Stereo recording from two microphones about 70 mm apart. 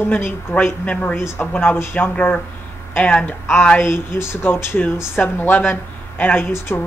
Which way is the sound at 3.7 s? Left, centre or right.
Left.